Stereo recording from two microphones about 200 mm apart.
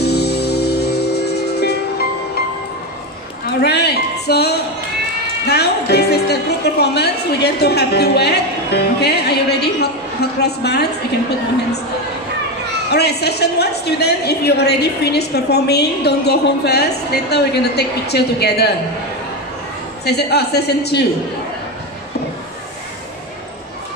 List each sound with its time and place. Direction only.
0.0 s music: 55° left (ahead or behind)
3.4 s a sound: 55° left (ahead or behind)
5.5 s a woman's voice: 55° left (ahead or behind)
12.9 s a woman's voice: 55° left (ahead or behind)
20.1 s a woman's voice: 55° left (ahead or behind)